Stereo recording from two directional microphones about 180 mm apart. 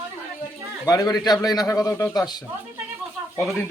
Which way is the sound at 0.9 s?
20° left (ahead or behind).